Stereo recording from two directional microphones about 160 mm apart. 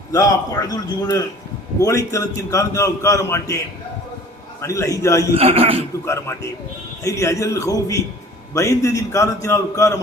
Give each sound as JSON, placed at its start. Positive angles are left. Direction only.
{"t": 0.1, "sound": "a man's voice", "side_deg": 20}
{"t": 4.6, "sound": "a man's voice", "side_deg": 20}
{"t": 5.4, "sound": "a man's voice", "side_deg": -35}
{"t": 6.1, "sound": "a man's voice", "side_deg": 20}